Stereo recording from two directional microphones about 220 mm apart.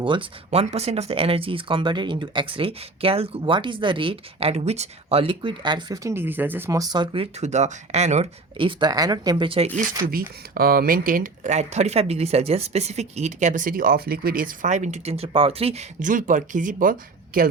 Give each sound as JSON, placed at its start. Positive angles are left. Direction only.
{"t": 0.0, "sound": "speech", "side_deg": -20}
{"t": 10.1, "sound": "speech", "side_deg": -40}